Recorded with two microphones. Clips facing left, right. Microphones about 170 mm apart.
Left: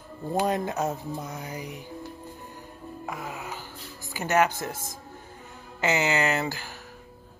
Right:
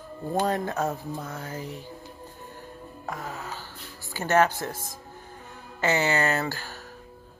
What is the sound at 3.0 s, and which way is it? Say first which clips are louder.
Speech: right 1 dB; 10° left (ahead or behind).